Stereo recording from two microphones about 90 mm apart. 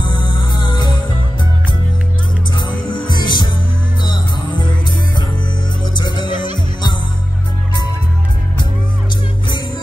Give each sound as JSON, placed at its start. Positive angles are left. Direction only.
{"t": 0.0, "sound": "music", "side_deg": 60}
{"t": 2.5, "sound": "music", "side_deg": 60}
{"t": 5.9, "sound": "music", "side_deg": 60}